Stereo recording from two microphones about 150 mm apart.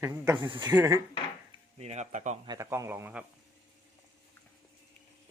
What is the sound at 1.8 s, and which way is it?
Speech, 50° right (ahead or behind).